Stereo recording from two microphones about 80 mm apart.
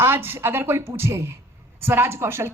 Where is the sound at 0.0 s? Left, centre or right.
Right.